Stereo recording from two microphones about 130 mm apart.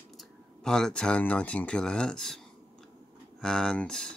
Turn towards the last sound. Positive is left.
turn(degrees=5)  # may be behind; listen again after turning